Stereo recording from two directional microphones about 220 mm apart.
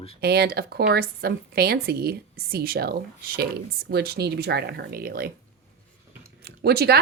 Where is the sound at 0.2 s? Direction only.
45° right (ahead or behind).